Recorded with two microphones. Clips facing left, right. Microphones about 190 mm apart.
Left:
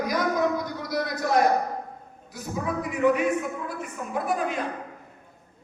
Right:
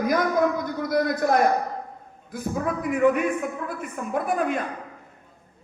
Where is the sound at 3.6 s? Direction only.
55° right (ahead or behind).